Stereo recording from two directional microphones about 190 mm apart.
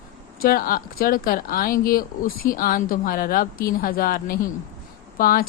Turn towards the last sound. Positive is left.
turn(degrees=50)  # may be behind; listen again after turning